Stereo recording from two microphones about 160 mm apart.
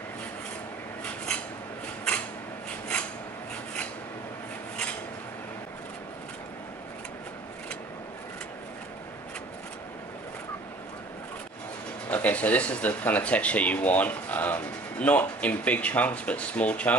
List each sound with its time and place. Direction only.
12.1 s speech: 10° left (ahead or behind)